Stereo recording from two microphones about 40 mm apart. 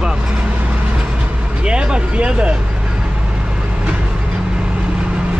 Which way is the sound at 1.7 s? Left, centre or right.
Right.